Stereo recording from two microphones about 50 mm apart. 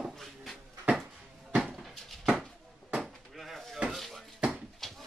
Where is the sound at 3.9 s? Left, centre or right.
Centre.